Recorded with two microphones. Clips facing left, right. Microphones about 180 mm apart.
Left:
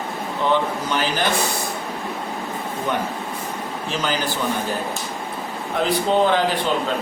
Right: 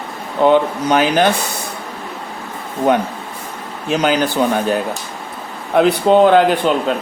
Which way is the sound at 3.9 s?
65° right (ahead or behind).